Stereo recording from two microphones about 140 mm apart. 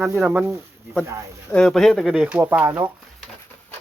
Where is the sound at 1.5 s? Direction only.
5° left (ahead or behind); by 2.7 s 15° right (ahead or behind).